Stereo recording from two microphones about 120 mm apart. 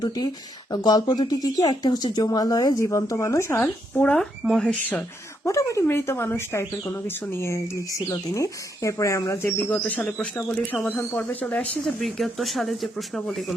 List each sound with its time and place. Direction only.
0.7 s speech: 35° left (ahead or behind)
3.6 s speech: 10° left (ahead or behind)
5.5 s speech: 25° left (ahead or behind)
9.6 s speech: 10° left (ahead or behind)
12.0 s speech: centre (ahead or behind)